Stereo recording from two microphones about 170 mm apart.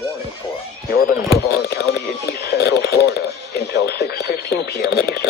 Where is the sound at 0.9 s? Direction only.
55° left (ahead or behind).